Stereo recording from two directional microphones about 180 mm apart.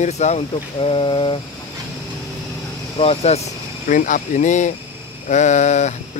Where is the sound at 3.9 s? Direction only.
45° left (ahead or behind).